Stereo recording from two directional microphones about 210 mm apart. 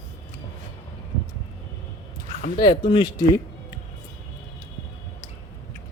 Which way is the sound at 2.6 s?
25° left (ahead or behind).